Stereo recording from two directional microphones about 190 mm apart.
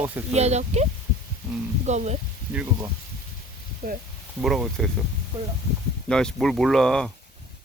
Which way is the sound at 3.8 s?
50° right (ahead or behind).